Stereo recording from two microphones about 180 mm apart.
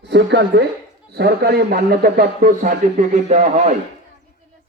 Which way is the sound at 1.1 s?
60° right (ahead or behind).